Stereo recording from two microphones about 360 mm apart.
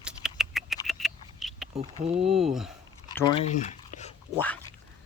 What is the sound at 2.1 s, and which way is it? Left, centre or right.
Speech, centre.